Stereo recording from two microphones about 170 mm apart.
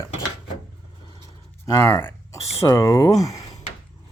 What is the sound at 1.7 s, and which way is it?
Speech, 15° left (ahead or behind).